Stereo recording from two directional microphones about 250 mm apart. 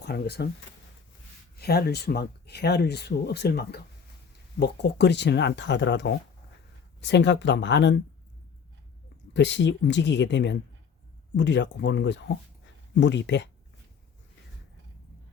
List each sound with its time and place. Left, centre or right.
0.0 s speech: left
1.5 s speech: left
9.3 s speech: left